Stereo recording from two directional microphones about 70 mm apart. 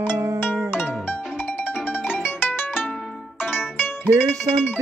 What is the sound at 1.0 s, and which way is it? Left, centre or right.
Music, left.